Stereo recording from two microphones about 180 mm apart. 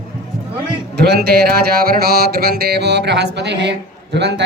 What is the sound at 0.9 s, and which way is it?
A man's voice, 65° right (ahead or behind).